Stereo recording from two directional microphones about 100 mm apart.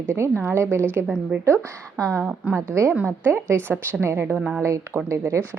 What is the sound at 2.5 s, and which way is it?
A woman's voice, 30° right (ahead or behind).